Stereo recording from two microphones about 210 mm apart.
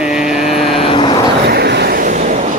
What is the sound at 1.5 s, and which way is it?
Vehicle, 50° right (ahead or behind).